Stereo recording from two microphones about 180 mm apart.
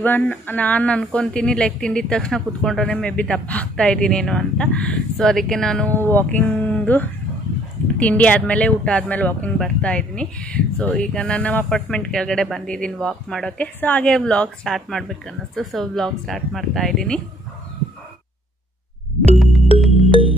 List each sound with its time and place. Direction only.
0.0 s speech: 10° left (ahead or behind)
19.3 s music: centre (ahead or behind)
20.1 s music: 30° right (ahead or behind)